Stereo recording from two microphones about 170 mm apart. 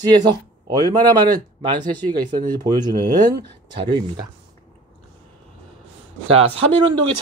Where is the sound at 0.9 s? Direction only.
25° right (ahead or behind).